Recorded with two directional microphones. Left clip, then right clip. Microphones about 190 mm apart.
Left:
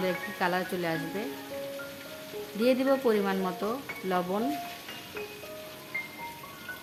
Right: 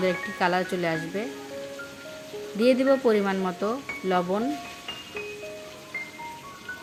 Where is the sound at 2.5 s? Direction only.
10° right (ahead or behind).